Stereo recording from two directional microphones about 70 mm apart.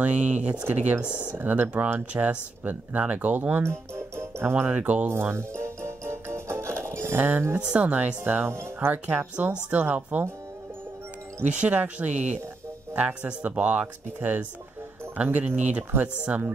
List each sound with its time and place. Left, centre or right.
0.0 s speech: centre
0.7 s speech: right
3.6 s music: right
4.6 s speech: centre
5.3 s music: right
7.2 s speech: right
11.5 s speech: centre